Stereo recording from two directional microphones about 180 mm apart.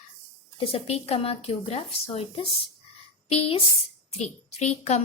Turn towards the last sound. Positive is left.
turn(degrees=35)  # may be behind; listen again after turning